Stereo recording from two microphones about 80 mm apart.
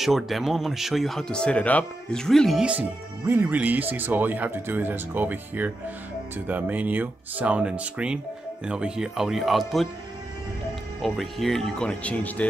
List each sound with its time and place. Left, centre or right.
0.0 s speech: centre
3.3 s speech: right; by 9.8 s centre
11.0 s speech: centre